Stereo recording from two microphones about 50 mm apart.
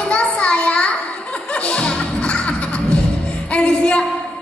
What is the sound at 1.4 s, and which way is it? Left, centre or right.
Music, left.